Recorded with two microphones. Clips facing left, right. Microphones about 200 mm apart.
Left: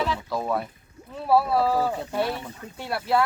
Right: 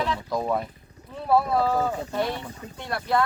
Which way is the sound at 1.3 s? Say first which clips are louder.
Left 1 dB; 5° left (ahead or behind).